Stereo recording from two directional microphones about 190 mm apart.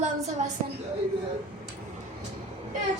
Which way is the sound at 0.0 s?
35° right (ahead or behind).